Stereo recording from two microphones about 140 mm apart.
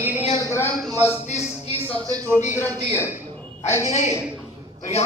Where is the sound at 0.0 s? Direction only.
15° right (ahead or behind).